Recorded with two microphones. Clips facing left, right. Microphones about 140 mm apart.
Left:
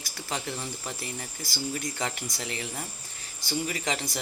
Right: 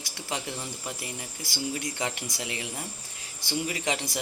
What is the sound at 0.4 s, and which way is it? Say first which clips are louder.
Speech: left 1 dB; 10° right (ahead or behind).